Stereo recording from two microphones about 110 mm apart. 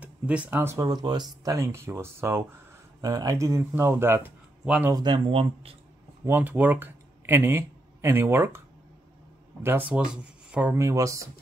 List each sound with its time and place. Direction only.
0.0 s speech: 10° right (ahead or behind)
0.8 s speech: 40° right (ahead or behind); by 2.4 s 20° right (ahead or behind)
3.0 s speech: 35° right (ahead or behind); by 4.9 s 10° right (ahead or behind)
4.9 s speech: 40° right (ahead or behind); by 5.8 s 60° right (ahead or behind)
6.2 s speech: 20° right (ahead or behind)
10.8 s speech: 30° right (ahead or behind)